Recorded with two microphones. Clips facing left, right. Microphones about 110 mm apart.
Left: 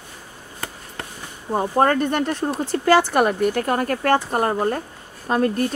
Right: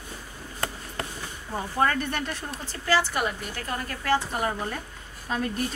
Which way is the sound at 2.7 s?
55° left (ahead or behind).